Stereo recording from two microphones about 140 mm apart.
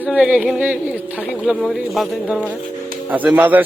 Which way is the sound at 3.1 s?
10° right (ahead or behind).